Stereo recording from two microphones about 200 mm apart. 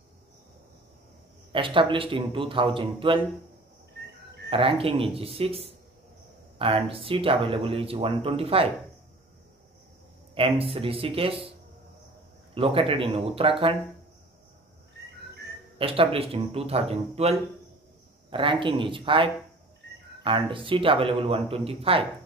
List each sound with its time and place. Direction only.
1.5 s speech: 25° right (ahead or behind)
4.5 s speech: 30° right (ahead or behind)
10.3 s speech: 25° right (ahead or behind)
12.5 s speech: 25° right (ahead or behind)
15.8 s speech: 30° right (ahead or behind)